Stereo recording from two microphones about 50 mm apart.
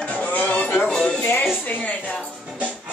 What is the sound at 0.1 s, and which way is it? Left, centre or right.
Music, left.